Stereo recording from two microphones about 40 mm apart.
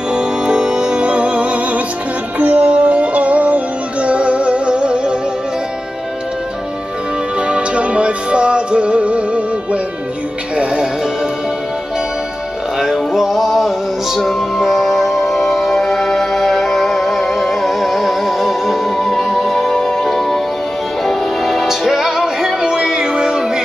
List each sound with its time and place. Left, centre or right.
0.1 s music: right
7.3 s music: right
12.7 s music: centre
20.1 s music: centre